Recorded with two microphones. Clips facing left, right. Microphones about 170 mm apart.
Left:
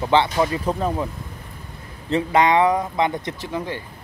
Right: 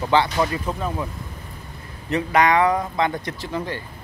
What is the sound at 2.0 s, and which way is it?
Speech, 25° left (ahead or behind).